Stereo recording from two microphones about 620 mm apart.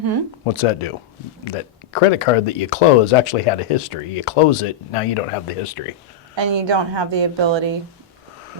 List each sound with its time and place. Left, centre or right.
0.4 s speech: left
6.3 s a woman's voice: right